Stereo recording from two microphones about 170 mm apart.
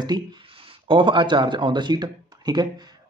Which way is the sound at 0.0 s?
25° right (ahead or behind).